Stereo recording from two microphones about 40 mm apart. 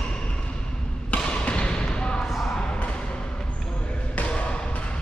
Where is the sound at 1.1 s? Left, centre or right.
Left.